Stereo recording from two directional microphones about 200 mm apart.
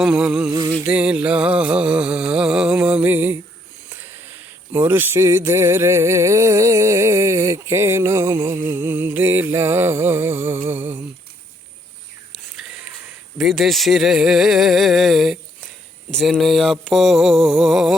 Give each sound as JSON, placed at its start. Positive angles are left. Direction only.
{"t": 0.0, "sound": "speech", "side_deg": -5}
{"t": 0.5, "sound": "a sound", "side_deg": -20}
{"t": 0.9, "sound": "music", "side_deg": -5}
{"t": 3.8, "sound": "speech", "side_deg": -10}
{"t": 12.3, "sound": "a sound", "side_deg": 0}
{"t": 13.4, "sound": "speech", "side_deg": 0}